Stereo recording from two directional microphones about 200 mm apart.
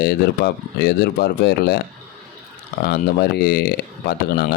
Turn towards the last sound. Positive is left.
turn(degrees=50)  # may be behind; listen again after turning